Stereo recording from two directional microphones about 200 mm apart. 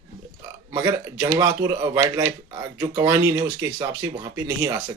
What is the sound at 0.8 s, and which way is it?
Speech, 10° right (ahead or behind).